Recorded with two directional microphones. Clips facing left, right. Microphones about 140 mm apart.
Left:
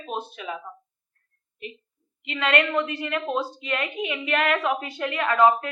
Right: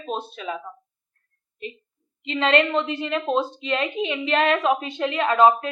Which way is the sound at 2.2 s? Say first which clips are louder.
Right 4 dB; 30° right (ahead or behind).